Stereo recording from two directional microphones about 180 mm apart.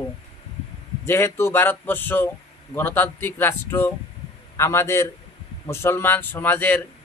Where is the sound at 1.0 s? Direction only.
15° left (ahead or behind).